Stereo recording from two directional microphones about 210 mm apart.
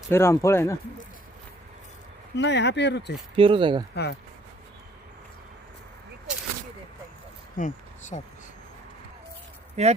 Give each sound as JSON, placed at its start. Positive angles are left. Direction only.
{"t": 0.1, "sound": "speech", "side_deg": 10}
{"t": 2.3, "sound": "speech", "side_deg": 55}
{"t": 3.3, "sound": "speech", "side_deg": -25}
{"t": 3.9, "sound": "speech", "side_deg": 50}
{"t": 7.5, "sound": "a sound", "side_deg": 35}
{"t": 9.8, "sound": "speech", "side_deg": -30}